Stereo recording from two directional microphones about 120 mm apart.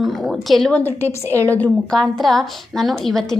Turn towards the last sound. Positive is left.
turn(degrees=0)  # may be behind; listen again after turning